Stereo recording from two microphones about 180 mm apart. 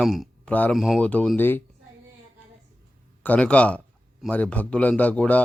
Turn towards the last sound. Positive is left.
turn(degrees=10)  # may be behind; listen again after turning